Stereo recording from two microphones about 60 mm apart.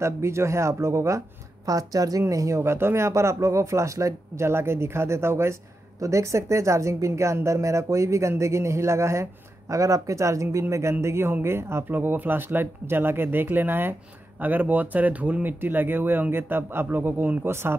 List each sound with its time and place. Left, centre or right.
0.0 s a woman's voice: right
1.7 s a woman's voice: right
5.9 s a woman's voice: right